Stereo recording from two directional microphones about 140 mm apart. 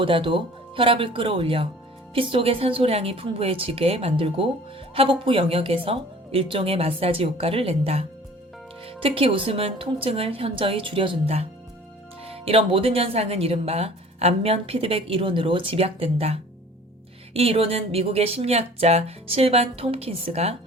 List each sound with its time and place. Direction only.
0.0 s speech: 35° right (ahead or behind)